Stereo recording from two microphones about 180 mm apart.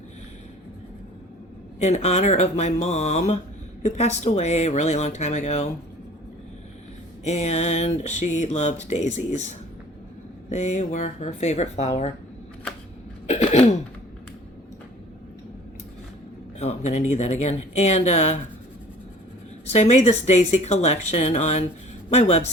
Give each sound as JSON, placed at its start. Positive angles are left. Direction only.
{"t": 1.8, "sound": "speech", "side_deg": 35}
{"t": 7.3, "sound": "speech", "side_deg": 35}
{"t": 10.5, "sound": "speech", "side_deg": 40}
{"t": 13.2, "sound": "cough", "side_deg": 40}
{"t": 16.6, "sound": "speech", "side_deg": 40}
{"t": 19.7, "sound": "speech", "side_deg": 40}